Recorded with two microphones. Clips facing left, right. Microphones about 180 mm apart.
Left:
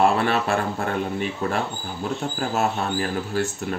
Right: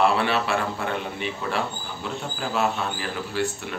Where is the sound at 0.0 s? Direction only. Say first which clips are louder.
Left 2 dB; 45° left (ahead or behind).